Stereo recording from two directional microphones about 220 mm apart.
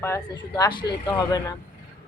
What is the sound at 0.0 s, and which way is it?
Speech, 15° left (ahead or behind).